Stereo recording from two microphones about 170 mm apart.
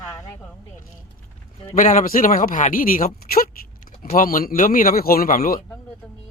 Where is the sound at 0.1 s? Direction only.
20° left (ahead or behind).